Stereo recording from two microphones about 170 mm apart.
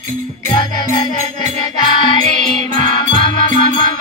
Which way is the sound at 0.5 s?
25° left (ahead or behind).